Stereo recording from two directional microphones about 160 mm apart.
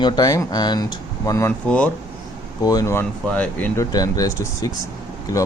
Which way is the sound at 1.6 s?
10° left (ahead or behind).